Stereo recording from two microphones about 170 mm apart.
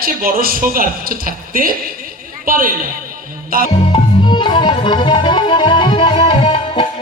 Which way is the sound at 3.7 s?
30° left (ahead or behind).